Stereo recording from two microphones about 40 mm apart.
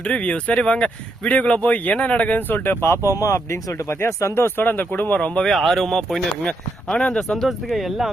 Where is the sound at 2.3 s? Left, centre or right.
Left.